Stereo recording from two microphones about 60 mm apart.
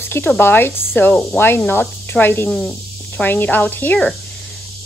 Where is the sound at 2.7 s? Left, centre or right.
Left.